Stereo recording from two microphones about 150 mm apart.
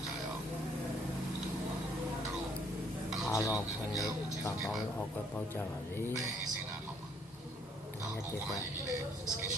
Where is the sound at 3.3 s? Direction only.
20° left (ahead or behind).